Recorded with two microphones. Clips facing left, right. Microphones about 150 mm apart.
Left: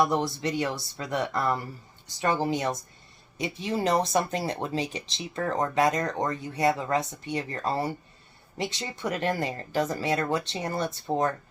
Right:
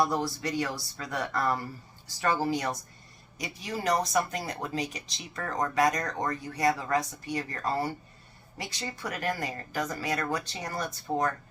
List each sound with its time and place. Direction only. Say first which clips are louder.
0.0 s speech: left 3 dB; 20° left (ahead or behind)